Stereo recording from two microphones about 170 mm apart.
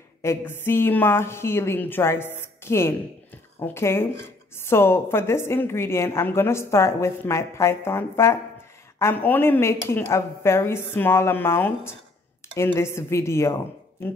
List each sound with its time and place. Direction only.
0.2 s speech: 15° left (ahead or behind)